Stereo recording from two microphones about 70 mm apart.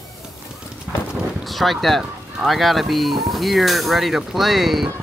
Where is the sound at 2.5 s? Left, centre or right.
Centre.